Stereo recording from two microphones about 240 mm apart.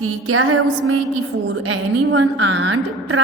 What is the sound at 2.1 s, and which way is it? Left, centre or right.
A woman's voice, right.